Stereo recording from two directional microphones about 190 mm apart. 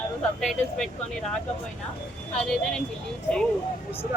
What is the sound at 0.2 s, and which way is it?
Speech, 5° left (ahead or behind).